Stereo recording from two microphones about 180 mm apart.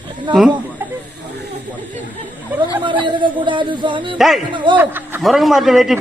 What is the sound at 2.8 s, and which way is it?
Speech, 25° right (ahead or behind).